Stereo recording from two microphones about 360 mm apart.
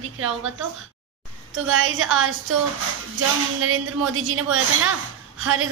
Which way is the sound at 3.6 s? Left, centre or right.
Right.